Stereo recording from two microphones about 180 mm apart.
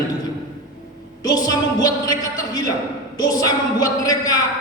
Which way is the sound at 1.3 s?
20° left (ahead or behind).